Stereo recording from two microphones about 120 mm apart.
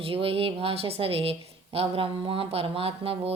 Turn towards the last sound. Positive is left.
turn(degrees=-50)  # may be behind; listen again after turning